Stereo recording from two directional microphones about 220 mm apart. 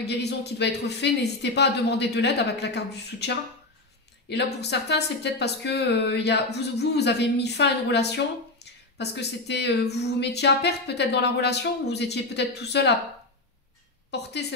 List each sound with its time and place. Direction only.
0.0 s a woman's voice: 50° left (ahead or behind)
4.6 s a woman's voice: 50° left (ahead or behind)
14.1 s a woman's voice: 50° left (ahead or behind)